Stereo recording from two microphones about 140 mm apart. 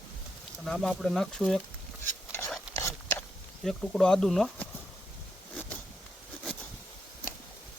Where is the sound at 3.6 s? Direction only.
5° left (ahead or behind).